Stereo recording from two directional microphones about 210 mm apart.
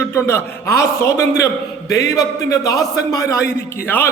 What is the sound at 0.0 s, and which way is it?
A man's voice, 10° left (ahead or behind).